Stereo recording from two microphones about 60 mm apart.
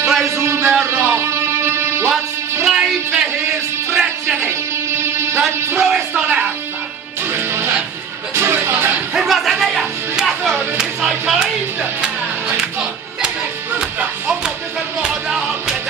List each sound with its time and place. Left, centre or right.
0.0 s music: centre
0.4 s a sound: right
0.8 s music: right
2.6 s music: centre
4.4 s music: right
5.8 s music: centre
6.2 s music: right
7.3 s music: right
9.1 s a sound: centre
13.7 s music: centre